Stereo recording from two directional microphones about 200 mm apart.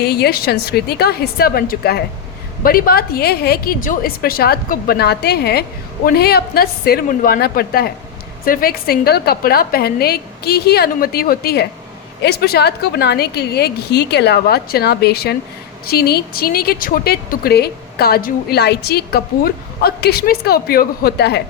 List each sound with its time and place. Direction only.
0.0 s speech: 50° left (ahead or behind)